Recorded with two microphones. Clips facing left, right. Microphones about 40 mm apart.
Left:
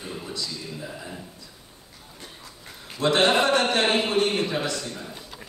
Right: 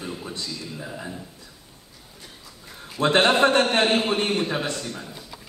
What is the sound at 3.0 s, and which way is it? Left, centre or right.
A man's voice, right.